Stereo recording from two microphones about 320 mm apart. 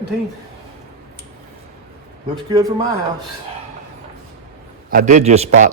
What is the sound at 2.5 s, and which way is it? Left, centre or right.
Speech, centre.